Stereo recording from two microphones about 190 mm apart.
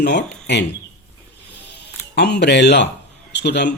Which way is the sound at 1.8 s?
60° left (ahead or behind).